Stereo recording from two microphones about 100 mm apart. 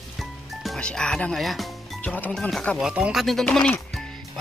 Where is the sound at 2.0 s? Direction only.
15° left (ahead or behind).